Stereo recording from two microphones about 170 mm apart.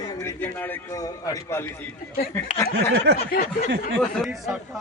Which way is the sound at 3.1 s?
75° right (ahead or behind).